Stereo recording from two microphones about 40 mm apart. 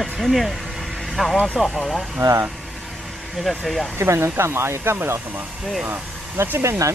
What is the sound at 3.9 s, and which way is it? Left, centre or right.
Speech, right.